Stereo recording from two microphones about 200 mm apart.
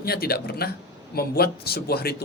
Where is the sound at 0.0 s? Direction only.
50° left (ahead or behind).